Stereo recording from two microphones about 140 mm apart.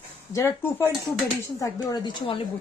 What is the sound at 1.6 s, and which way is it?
Speech, 30° left (ahead or behind).